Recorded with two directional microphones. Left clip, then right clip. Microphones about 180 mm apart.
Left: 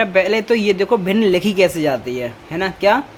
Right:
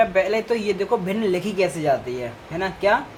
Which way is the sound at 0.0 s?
55° left (ahead or behind).